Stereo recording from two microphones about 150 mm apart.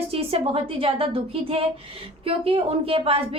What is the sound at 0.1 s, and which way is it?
A woman's voice, 40° right (ahead or behind).